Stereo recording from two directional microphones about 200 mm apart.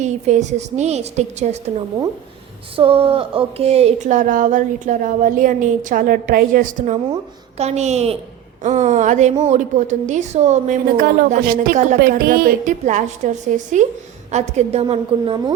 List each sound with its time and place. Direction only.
0.0 s a woman's voice: 35° right (ahead or behind)
2.7 s a woman's voice: 25° right (ahead or behind)